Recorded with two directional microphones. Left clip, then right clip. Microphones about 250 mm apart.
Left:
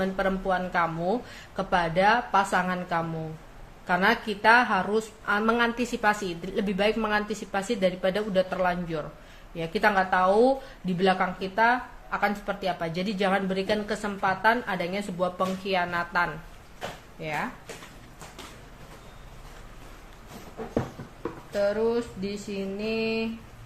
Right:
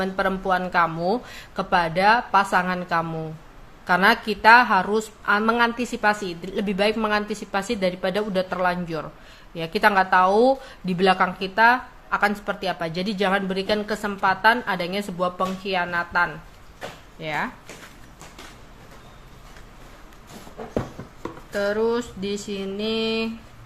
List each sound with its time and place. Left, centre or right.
0.0 s speech: centre
21.5 s a sound: centre
22.8 s speech: centre